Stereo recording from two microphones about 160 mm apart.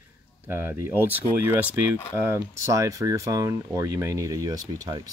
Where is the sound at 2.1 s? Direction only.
15° right (ahead or behind).